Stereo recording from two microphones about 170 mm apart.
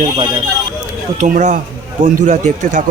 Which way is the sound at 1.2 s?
45° right (ahead or behind).